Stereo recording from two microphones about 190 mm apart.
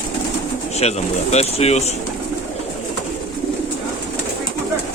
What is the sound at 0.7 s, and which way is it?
Speech, 35° left (ahead or behind).